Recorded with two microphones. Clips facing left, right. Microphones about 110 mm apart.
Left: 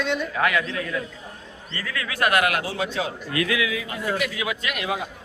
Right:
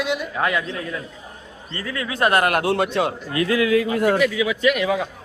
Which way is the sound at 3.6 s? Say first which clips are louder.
Right 9 dB; 55° right (ahead or behind).